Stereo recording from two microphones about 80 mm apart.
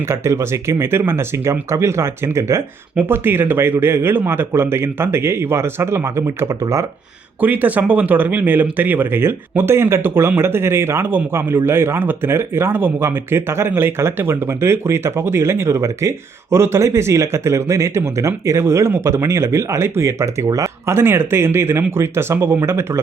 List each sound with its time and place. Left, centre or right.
0.1 s speech: right
2.9 s speech: right
7.4 s speech: centre